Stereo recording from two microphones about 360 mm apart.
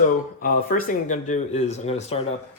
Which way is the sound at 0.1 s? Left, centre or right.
Left.